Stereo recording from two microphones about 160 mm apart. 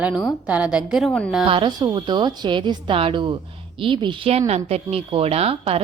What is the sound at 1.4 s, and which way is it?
A woman's voice, 30° right (ahead or behind).